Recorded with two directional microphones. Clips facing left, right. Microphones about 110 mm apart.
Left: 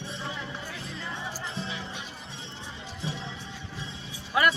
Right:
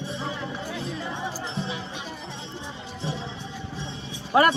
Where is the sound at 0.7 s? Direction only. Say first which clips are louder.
Right 6 dB; 20° right (ahead or behind).